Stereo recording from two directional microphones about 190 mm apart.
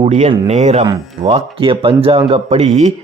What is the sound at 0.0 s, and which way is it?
Speech, 35° right (ahead or behind).